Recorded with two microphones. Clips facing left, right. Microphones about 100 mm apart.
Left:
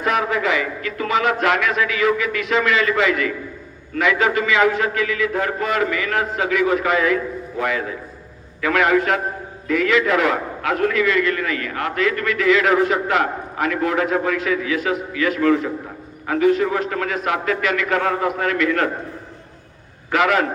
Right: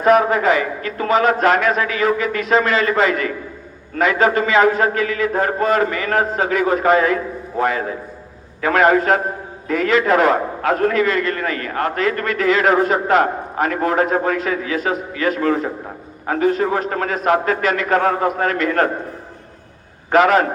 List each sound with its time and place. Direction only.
0.0 s a man's voice: 40° right (ahead or behind)
20.1 s a man's voice: 40° right (ahead or behind)